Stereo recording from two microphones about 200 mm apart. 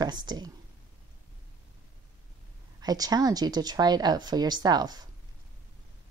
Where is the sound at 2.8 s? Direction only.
20° right (ahead or behind).